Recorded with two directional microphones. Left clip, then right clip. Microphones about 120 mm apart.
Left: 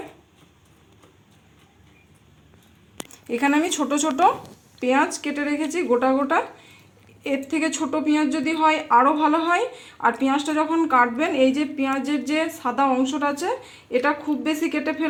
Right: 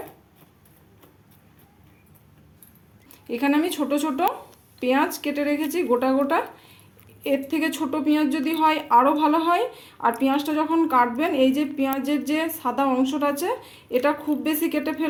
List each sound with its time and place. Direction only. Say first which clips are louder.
3.1 s a woman's voice: left 2 dB; 20° left (ahead or behind)